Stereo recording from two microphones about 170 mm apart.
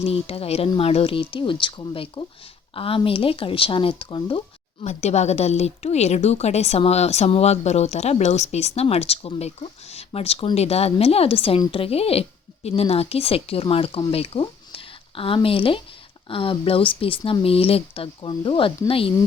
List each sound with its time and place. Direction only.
0.0 s a woman's voice: 35° left (ahead or behind)
4.8 s a woman's voice: 45° left (ahead or behind)